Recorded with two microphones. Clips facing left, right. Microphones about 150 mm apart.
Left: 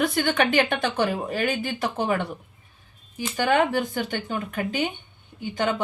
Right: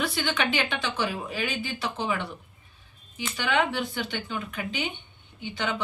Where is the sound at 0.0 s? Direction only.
50° left (ahead or behind).